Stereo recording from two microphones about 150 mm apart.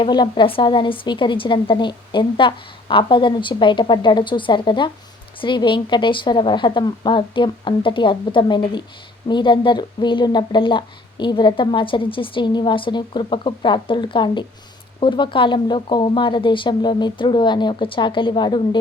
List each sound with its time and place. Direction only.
0.0 s speech: 30° left (ahead or behind)